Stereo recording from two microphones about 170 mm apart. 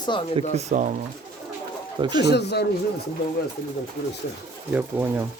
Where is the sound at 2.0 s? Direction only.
25° right (ahead or behind).